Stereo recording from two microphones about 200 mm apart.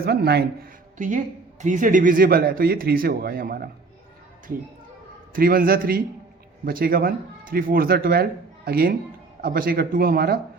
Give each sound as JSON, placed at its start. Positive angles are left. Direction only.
{"t": 0.0, "sound": "a man's voice", "side_deg": -50}
{"t": 5.3, "sound": "a man's voice", "side_deg": -45}